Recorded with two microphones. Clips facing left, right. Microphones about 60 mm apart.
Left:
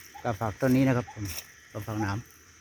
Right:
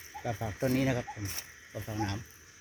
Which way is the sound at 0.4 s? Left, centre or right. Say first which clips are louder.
Left 7 dB; left.